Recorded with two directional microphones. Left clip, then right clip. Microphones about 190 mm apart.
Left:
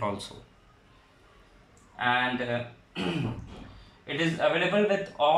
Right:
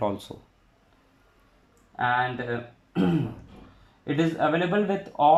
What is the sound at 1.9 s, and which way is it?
Speech, 45° right (ahead or behind).